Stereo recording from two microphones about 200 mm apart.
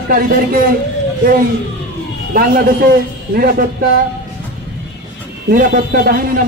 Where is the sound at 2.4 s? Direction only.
45° right (ahead or behind).